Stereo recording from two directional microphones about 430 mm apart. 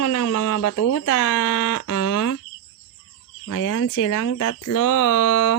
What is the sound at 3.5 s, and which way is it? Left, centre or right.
Speech, left.